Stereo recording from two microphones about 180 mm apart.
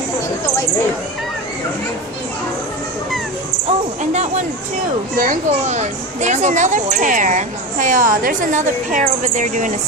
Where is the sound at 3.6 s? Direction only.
40° right (ahead or behind).